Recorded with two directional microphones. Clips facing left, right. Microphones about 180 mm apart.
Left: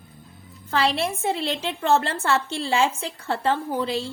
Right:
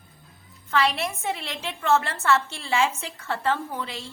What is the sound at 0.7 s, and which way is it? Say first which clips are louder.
A woman's voice: left 2 dB; 30° left (ahead or behind).